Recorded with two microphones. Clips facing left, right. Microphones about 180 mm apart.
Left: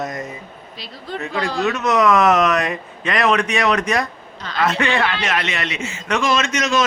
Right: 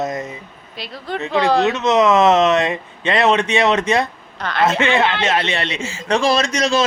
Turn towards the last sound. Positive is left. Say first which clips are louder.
# right 2 dB
turn(degrees=-30)  # may be behind; listen again after turning